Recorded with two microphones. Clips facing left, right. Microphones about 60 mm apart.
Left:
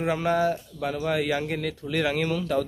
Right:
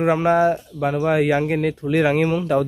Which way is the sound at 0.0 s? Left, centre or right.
Right.